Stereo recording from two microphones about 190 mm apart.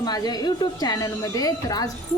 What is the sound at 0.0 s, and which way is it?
A woman's voice, 20° left (ahead or behind).